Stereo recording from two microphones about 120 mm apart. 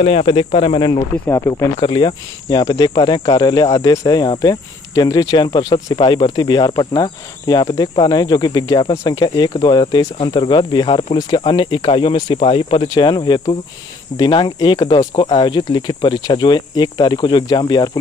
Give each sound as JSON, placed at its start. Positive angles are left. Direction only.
{"t": 0.0, "sound": "speech", "side_deg": 55}
{"t": 0.9, "sound": "speech", "side_deg": 25}
{"t": 1.8, "sound": "speech", "side_deg": 40}
{"t": 12.8, "sound": "speech", "side_deg": 35}